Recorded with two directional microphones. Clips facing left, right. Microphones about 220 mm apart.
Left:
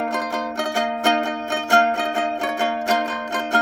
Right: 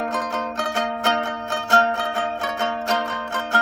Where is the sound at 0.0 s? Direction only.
10° left (ahead or behind).